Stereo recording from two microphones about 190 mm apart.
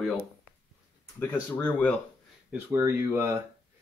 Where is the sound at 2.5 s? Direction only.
15° right (ahead or behind).